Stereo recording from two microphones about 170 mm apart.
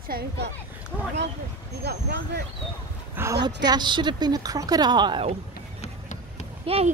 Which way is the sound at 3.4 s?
25° right (ahead or behind).